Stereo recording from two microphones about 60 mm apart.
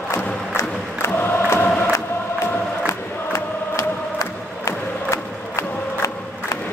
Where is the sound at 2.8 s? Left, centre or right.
Left.